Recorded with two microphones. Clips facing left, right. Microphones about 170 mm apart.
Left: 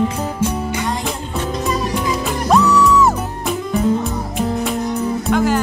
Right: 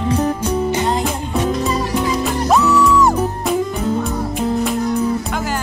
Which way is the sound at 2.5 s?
Centre (ahead or behind).